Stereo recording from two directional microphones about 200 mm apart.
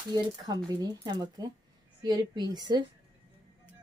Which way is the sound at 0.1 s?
20° right (ahead or behind).